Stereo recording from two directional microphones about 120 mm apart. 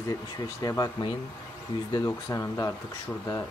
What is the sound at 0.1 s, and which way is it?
Speech, 30° left (ahead or behind).